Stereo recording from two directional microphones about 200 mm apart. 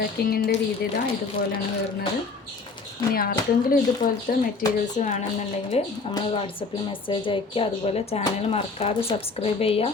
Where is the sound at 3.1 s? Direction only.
50° left (ahead or behind); by 9.9 s 30° left (ahead or behind).